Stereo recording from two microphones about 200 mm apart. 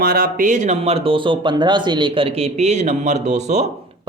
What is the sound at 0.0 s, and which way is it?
Speech, 50° right (ahead or behind).